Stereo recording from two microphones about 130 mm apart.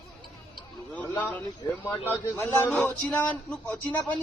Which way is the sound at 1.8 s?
20° left (ahead or behind).